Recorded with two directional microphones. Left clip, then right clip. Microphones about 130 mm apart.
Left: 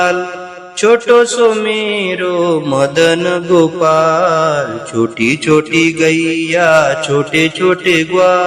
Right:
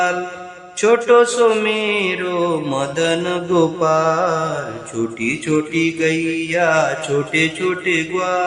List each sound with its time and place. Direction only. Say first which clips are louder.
0.8 s speech: left 4 dB; 25° left (ahead or behind)